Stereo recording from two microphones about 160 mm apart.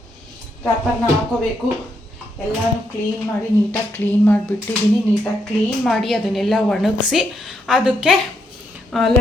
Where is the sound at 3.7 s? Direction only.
10° left (ahead or behind).